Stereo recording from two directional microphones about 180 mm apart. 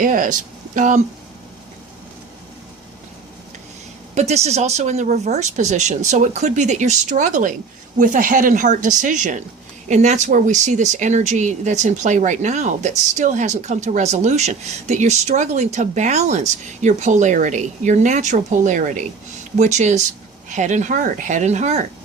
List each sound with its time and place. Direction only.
0.0 s speech: 50° right (ahead or behind)
4.1 s speech: 40° right (ahead or behind)